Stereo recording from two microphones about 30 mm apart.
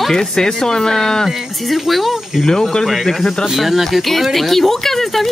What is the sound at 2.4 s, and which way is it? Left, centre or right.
Speech, centre.